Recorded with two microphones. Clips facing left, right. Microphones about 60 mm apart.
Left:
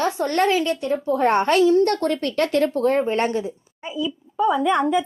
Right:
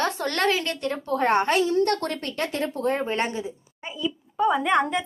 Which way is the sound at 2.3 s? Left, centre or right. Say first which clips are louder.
Left 8 dB; left.